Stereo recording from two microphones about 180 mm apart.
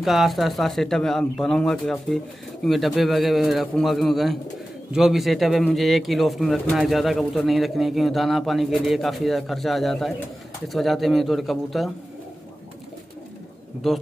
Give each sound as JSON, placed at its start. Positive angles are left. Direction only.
{"t": 0.0, "sound": "speech", "side_deg": 0}
{"t": 13.8, "sound": "speech", "side_deg": 0}